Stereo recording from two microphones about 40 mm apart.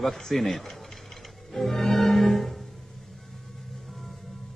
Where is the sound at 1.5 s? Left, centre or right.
Centre.